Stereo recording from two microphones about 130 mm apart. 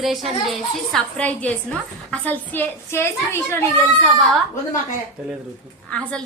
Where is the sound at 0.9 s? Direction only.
10° left (ahead or behind).